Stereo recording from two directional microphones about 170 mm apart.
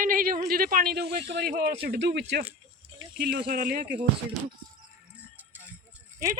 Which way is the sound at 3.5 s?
60° right (ahead or behind).